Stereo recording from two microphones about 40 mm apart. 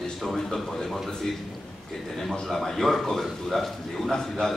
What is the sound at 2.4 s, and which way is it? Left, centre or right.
A man's voice, centre.